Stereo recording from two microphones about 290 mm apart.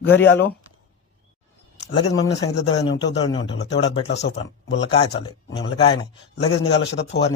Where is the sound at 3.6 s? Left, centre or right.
Left.